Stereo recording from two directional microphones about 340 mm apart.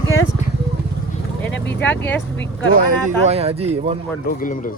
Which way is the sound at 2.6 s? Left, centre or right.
Right.